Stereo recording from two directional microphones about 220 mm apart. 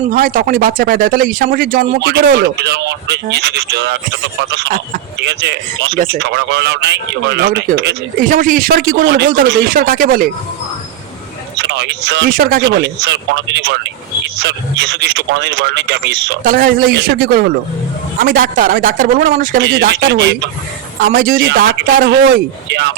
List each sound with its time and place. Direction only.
0.1 s a man's voice: 40° right (ahead or behind)
11.6 s a man's voice: 55° right (ahead or behind)
16.4 s a man's voice: 40° right (ahead or behind)
21.0 s speech: 40° right (ahead or behind)